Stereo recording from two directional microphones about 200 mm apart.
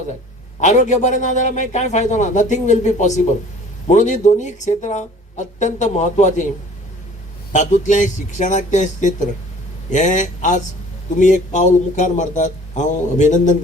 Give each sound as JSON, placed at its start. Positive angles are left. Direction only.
{"t": 0.6, "sound": "speech", "side_deg": 35}
{"t": 7.5, "sound": "speech", "side_deg": 35}